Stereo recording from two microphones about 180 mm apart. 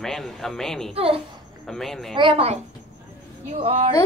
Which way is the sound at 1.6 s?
Centre (ahead or behind).